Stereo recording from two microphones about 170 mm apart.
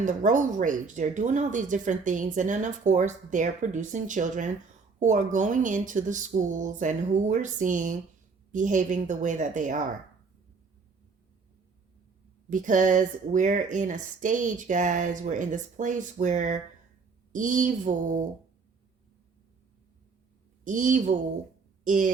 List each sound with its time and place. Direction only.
0.0 s speech: 45° right (ahead or behind)
12.5 s speech: 50° right (ahead or behind)
20.7 s speech: 50° right (ahead or behind)